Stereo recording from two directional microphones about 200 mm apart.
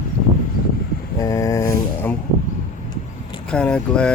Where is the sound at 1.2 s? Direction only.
15° left (ahead or behind).